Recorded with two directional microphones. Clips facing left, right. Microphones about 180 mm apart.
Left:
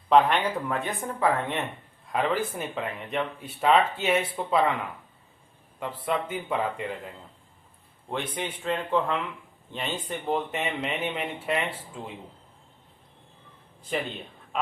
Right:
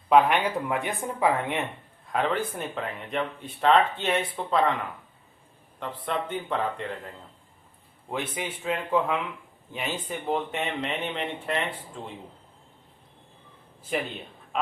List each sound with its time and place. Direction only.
0.1 s speech: 10° right (ahead or behind)
2.0 s speech: centre (ahead or behind)
5.8 s a man's voice: 5° left (ahead or behind)
8.1 s speech: 5° right (ahead or behind)
13.9 s speech: 5° right (ahead or behind)